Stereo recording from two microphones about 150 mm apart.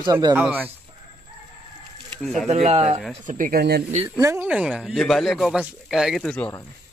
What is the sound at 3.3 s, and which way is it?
Speech, 65° right (ahead or behind).